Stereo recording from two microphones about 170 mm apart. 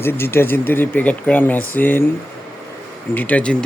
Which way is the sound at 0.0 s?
15° left (ahead or behind).